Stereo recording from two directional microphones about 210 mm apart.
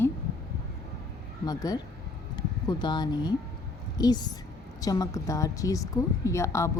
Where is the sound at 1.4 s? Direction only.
20° left (ahead or behind).